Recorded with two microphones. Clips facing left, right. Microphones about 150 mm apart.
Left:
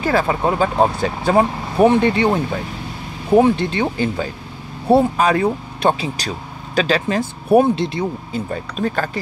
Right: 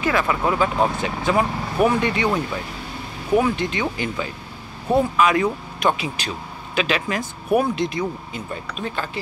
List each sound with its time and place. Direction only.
0.0 s speech: 35° left (ahead or behind)
8.5 s speech: 45° left (ahead or behind)